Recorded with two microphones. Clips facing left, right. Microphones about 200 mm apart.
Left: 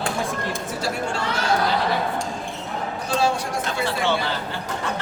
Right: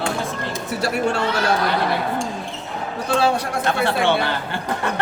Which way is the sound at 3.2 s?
60° right (ahead or behind).